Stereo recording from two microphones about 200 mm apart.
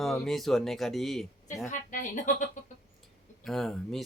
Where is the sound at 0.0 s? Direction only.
Centre (ahead or behind).